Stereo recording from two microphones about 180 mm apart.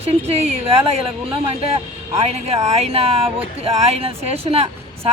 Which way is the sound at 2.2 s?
35° right (ahead or behind).